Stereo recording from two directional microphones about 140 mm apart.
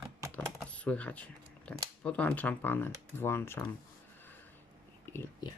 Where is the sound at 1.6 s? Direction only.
10° left (ahead or behind).